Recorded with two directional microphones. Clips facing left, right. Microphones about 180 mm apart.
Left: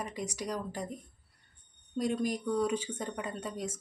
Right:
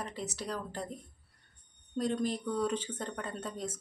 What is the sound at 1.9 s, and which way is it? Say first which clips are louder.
Speech: left 1 dB; 10° left (ahead or behind).